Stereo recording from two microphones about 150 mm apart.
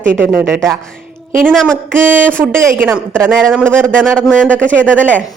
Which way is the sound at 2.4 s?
15° right (ahead or behind).